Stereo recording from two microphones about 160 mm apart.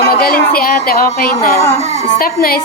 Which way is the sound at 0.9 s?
70° left (ahead or behind).